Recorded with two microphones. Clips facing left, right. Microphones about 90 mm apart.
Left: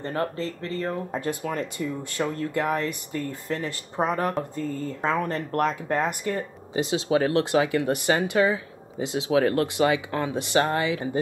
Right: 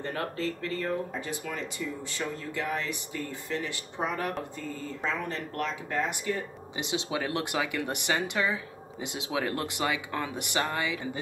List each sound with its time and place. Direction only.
0.0 s speech: 35° left (ahead or behind)
1.1 s speech: 45° left (ahead or behind)